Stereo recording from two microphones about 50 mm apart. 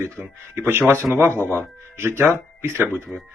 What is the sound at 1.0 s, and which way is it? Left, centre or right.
Speech, right.